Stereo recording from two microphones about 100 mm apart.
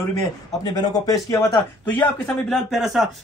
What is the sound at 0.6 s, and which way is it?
Speech, 45° left (ahead or behind).